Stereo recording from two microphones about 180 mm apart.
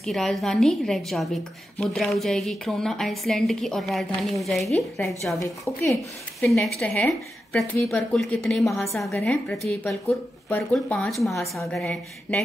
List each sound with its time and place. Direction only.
0.0 s a woman's voice: centre (ahead or behind)
5.4 s a woman's voice: 15° left (ahead or behind)
6.5 s a woman's voice: 5° left (ahead or behind)